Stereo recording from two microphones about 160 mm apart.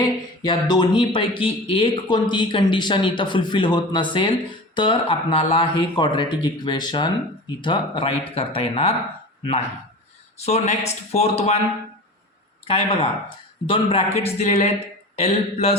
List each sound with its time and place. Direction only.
0.0 s speech: 25° left (ahead or behind)
12.6 s speech: 35° left (ahead or behind)